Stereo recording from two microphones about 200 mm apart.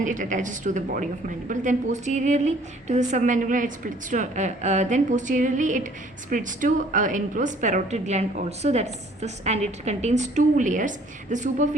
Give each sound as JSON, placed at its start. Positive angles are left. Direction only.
{"t": 0.0, "sound": "a woman's voice", "side_deg": -40}